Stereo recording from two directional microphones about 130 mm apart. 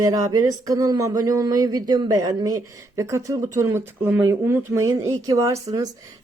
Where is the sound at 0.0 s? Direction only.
30° right (ahead or behind).